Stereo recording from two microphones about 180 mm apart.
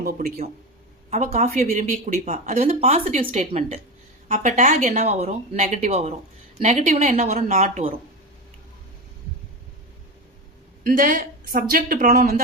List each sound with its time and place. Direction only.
0.0 s speech: 60° right (ahead or behind)
1.1 s speech: 40° right (ahead or behind)
10.8 s a woman's voice: 50° right (ahead or behind)